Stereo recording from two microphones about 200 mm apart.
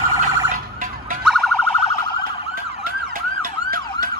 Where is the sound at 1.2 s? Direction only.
Centre (ahead or behind).